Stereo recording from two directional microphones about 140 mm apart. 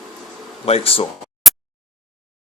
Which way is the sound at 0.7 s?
45° left (ahead or behind).